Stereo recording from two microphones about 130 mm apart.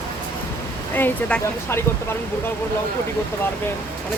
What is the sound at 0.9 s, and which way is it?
Speech, 10° left (ahead or behind).